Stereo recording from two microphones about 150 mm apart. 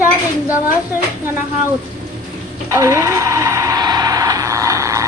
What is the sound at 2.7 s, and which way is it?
Vehicle, 20° right (ahead or behind).